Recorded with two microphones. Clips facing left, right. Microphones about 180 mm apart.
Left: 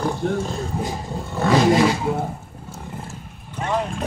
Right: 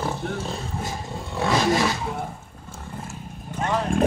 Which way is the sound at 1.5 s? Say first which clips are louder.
Left 6 dB; 25° left (ahead or behind).